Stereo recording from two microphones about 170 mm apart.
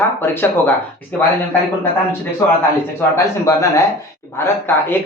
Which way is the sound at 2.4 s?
15° left (ahead or behind).